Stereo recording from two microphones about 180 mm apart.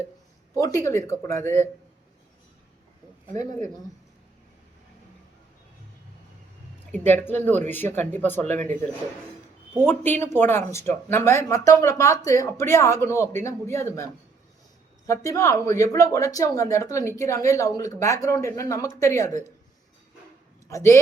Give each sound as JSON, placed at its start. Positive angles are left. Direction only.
{"t": 0.5, "sound": "speech", "side_deg": 20}
{"t": 6.9, "sound": "speech", "side_deg": 10}
{"t": 9.8, "sound": "speech", "side_deg": 10}
{"t": 20.7, "sound": "speech", "side_deg": 15}